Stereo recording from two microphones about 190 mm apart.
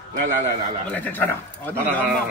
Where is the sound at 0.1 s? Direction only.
45° right (ahead or behind).